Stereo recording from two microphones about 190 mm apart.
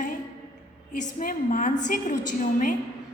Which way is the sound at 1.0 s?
45° left (ahead or behind).